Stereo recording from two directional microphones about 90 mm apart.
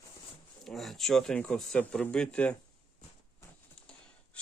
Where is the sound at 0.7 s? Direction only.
Centre (ahead or behind).